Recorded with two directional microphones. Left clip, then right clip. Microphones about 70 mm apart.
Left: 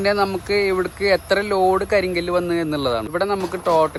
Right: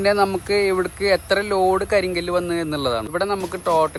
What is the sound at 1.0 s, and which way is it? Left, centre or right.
A man's voice, left.